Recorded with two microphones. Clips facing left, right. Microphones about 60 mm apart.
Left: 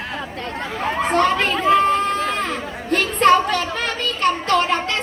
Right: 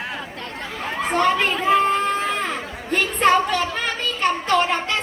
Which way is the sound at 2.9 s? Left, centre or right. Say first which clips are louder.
Left 3 dB; centre.